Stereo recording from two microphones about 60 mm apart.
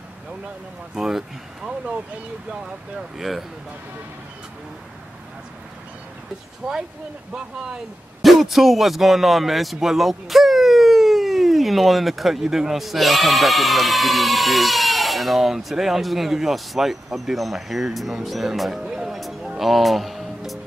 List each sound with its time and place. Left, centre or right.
0.9 s speech: centre
3.0 s speech: centre
6.6 s speech: centre
8.2 s a man's voice: centre
19.5 s music: centre